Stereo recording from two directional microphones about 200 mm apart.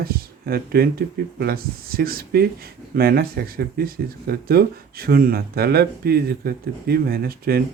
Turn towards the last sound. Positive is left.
turn(degrees=-50)  # may be behind; listen again after turning